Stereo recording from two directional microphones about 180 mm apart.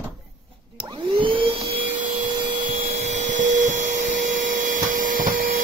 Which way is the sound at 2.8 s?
40° right (ahead or behind).